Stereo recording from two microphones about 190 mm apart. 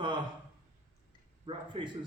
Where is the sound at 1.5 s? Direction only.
25° right (ahead or behind).